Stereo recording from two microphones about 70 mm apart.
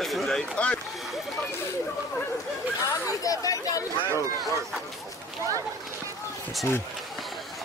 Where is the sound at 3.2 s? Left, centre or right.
Left.